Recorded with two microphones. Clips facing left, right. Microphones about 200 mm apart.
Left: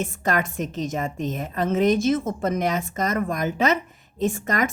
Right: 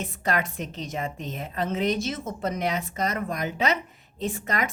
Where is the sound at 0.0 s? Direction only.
45° left (ahead or behind).